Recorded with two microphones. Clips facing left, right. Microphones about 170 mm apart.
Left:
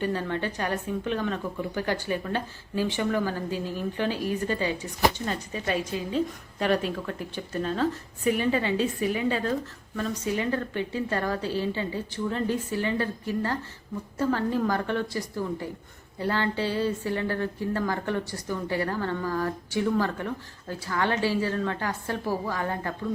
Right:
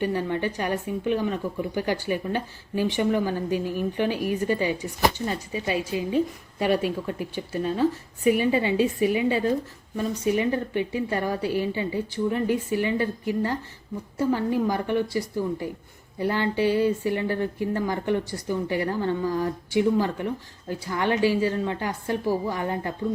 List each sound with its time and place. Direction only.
0.0 s a woman's voice: 15° right (ahead or behind)